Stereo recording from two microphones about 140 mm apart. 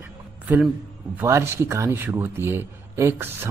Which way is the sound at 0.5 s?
15° right (ahead or behind).